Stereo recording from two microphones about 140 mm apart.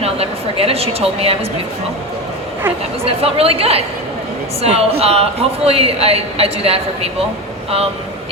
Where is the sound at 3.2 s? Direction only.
45° right (ahead or behind).